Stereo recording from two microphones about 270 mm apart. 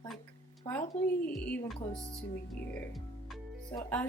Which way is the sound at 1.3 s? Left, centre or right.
Centre.